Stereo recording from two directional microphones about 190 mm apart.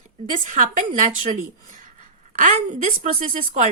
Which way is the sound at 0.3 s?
40° right (ahead or behind).